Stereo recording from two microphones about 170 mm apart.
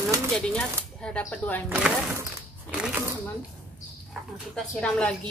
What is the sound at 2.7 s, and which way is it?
Speech, 5° right (ahead or behind).